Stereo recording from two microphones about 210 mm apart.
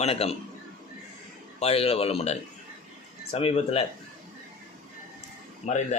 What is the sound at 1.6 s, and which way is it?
Speech, 30° left (ahead or behind).